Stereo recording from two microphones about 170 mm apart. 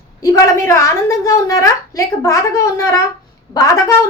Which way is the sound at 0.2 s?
20° left (ahead or behind).